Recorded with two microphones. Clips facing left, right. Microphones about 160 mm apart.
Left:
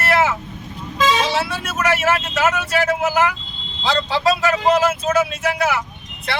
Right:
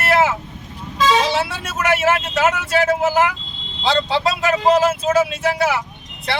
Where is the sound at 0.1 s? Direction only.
35° right (ahead or behind).